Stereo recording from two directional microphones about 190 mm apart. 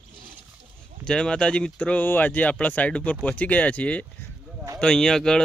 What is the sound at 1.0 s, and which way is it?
Speech, 5° left (ahead or behind).